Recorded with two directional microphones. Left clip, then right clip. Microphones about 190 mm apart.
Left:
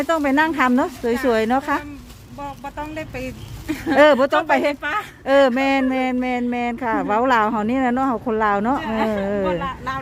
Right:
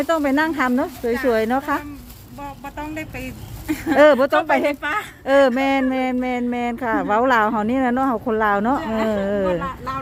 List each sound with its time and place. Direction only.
0.0 s speech: 5° left (ahead or behind)
3.9 s speech: 5° left (ahead or behind)
9.6 s speech: 35° left (ahead or behind)